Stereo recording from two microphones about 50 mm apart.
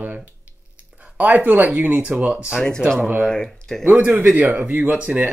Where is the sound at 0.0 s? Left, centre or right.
Right.